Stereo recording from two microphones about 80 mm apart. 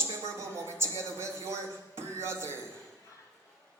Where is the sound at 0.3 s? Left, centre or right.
Right.